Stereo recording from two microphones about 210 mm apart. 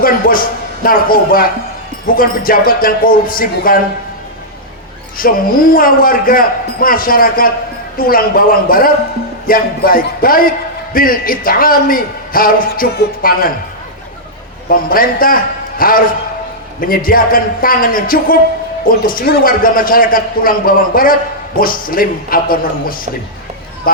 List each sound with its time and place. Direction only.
0.0 s a man's voice: 45° left (ahead or behind)
5.2 s a man's voice: 45° left (ahead or behind)
14.7 s a man's voice: 45° left (ahead or behind)